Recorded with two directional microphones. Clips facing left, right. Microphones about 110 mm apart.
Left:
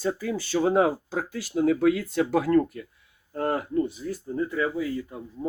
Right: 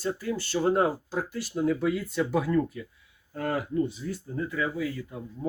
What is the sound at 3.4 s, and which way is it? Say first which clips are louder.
Speech: left 2 dB; 40° left (ahead or behind).